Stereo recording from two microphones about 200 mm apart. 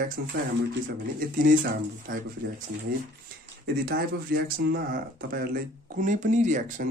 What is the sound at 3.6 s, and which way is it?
A man's voice, 50° right (ahead or behind).